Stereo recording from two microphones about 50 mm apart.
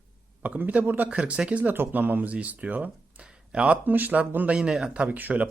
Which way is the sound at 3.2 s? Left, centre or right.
Right.